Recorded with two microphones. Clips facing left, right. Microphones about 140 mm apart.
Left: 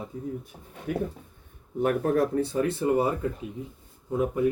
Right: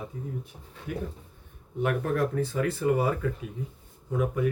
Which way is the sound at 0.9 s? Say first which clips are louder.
Left 5 dB; 50° left (ahead or behind).